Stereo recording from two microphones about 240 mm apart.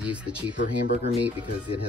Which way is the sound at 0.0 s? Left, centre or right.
Centre.